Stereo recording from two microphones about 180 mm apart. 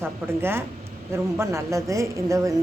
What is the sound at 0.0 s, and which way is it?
A woman's voice, 10° right (ahead or behind).